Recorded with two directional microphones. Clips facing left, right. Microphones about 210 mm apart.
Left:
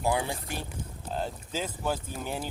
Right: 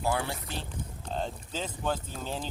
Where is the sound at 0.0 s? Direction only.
15° left (ahead or behind).